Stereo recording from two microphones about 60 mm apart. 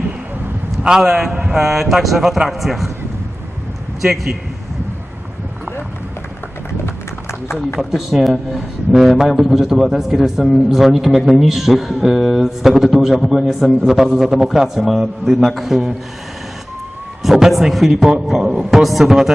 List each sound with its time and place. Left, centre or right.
0.8 s speech: centre
4.0 s speech: centre
6.8 s run: left
7.8 s speech: centre
17.2 s speech: centre